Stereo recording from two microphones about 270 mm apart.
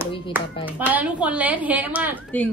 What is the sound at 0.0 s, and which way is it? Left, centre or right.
Speech, centre.